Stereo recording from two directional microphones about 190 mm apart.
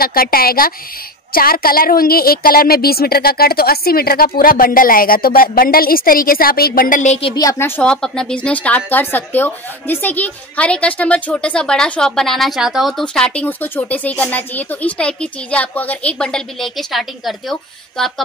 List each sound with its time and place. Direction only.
0.0 s a woman's voice: 50° left (ahead or behind); by 7.4 s 30° left (ahead or behind)
7.4 s a woman's voice: 15° left (ahead or behind)